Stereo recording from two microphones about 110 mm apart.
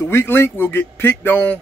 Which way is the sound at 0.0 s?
20° left (ahead or behind).